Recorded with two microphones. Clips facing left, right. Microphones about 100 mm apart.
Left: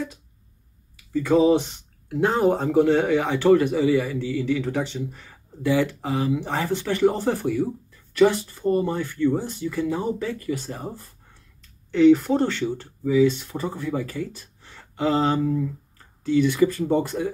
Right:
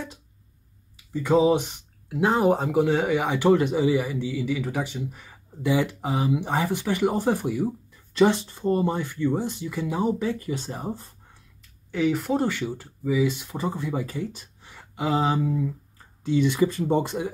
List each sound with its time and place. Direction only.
1.1 s speech: 20° right (ahead or behind)
11.9 s speech: 5° right (ahead or behind)